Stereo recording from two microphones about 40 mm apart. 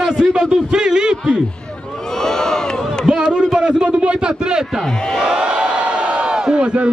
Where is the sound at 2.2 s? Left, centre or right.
Centre.